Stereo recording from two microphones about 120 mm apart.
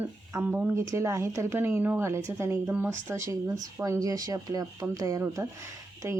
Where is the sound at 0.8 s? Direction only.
25° right (ahead or behind).